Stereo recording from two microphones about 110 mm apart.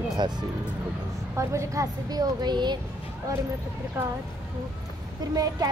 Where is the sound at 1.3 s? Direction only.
25° right (ahead or behind); by 2.8 s 40° right (ahead or behind).